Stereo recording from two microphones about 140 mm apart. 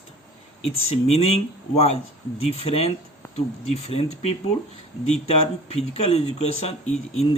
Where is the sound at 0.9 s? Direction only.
50° left (ahead or behind).